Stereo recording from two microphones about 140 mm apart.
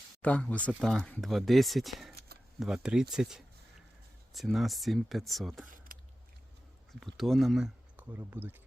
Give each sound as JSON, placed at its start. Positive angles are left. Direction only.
{"t": 0.2, "sound": "speech", "side_deg": 10}
{"t": 5.7, "sound": "a sound", "side_deg": -75}
{"t": 7.0, "sound": "speech", "side_deg": 0}
{"t": 7.9, "sound": "speech", "side_deg": -15}